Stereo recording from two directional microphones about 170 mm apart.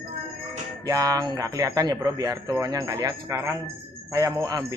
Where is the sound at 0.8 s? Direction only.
20° right (ahead or behind).